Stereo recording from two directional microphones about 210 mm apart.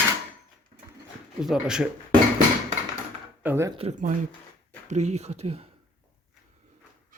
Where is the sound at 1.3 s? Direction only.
5° right (ahead or behind).